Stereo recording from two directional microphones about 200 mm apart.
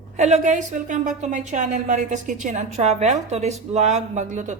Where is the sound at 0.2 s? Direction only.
35° right (ahead or behind).